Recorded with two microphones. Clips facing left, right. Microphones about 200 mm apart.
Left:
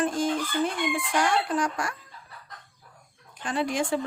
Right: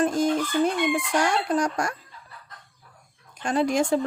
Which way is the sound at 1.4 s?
40° right (ahead or behind).